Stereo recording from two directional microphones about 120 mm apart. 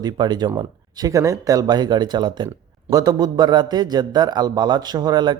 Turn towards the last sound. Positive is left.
turn(degrees=-35)  # may be behind; listen again after turning